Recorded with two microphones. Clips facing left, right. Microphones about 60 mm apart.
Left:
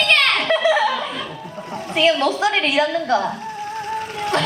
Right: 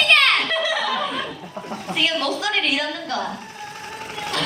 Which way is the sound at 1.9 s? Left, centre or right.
Left.